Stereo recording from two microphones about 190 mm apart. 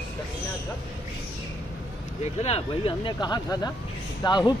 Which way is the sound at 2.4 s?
30° left (ahead or behind).